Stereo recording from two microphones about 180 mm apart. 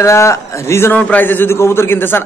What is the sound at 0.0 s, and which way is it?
A man's voice, 15° left (ahead or behind).